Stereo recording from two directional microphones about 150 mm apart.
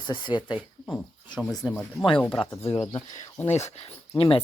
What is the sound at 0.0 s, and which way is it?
Speech, 30° left (ahead or behind).